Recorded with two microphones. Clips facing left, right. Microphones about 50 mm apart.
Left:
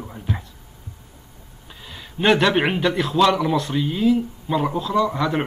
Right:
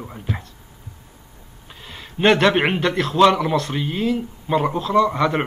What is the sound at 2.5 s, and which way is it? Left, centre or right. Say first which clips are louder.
Speech: right 1 dB; centre.